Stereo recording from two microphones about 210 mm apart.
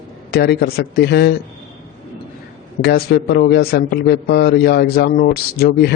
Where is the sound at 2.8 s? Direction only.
50° left (ahead or behind).